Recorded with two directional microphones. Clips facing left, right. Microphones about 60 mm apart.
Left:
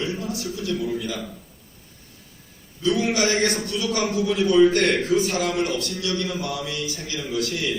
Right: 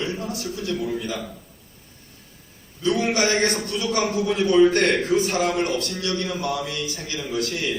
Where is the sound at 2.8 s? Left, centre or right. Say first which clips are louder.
Even; right.